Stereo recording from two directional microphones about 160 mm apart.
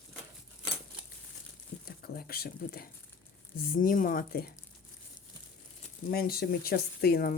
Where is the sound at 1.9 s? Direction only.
75° left (ahead or behind).